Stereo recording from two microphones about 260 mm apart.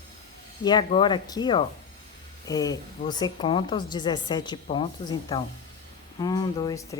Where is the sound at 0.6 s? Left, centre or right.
Centre.